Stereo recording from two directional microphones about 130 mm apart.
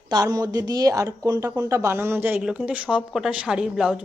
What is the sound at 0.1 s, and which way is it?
A woman's voice, 30° right (ahead or behind).